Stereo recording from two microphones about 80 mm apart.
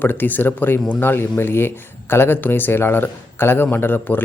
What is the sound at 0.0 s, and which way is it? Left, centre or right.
Speech, left.